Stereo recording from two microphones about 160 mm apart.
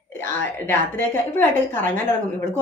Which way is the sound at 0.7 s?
15° left (ahead or behind).